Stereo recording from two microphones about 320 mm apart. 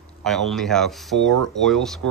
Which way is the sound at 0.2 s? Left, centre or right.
Centre.